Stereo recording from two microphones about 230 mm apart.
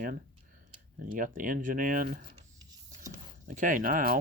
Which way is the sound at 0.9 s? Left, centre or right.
Right.